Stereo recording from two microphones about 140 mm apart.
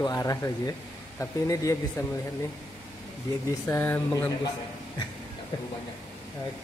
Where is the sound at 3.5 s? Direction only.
20° left (ahead or behind).